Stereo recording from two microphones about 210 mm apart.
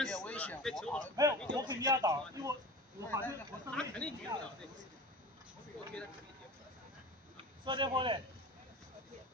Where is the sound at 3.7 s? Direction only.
5° left (ahead or behind).